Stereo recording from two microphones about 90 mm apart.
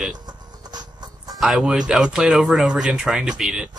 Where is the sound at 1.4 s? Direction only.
5° right (ahead or behind).